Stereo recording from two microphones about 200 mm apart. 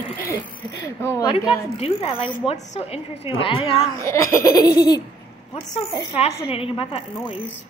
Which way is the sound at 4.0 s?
15° left (ahead or behind).